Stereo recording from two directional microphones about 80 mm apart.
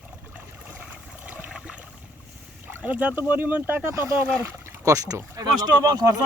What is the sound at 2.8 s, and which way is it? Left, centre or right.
Speech, centre.